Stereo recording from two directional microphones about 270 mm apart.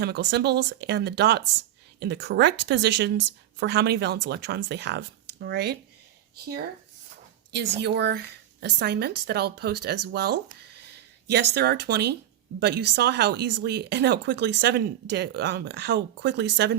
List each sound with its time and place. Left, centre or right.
0.0 s speech: right